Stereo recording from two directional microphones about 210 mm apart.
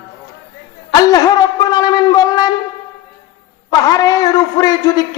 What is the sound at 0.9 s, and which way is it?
Speech, 20° left (ahead or behind).